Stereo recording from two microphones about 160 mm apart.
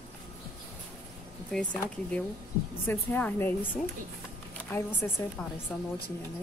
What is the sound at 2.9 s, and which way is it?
Speech, 10° left (ahead or behind).